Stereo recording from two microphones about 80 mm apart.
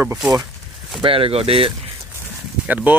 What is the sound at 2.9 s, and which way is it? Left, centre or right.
Speech, right.